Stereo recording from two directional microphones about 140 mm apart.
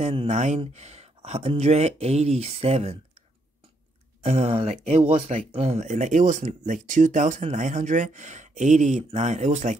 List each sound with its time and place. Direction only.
0.0 s speech: 45° right (ahead or behind)
4.2 s speech: 45° right (ahead or behind)